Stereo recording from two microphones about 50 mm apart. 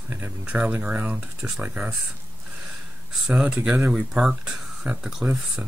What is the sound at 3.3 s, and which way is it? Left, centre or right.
Speech, right.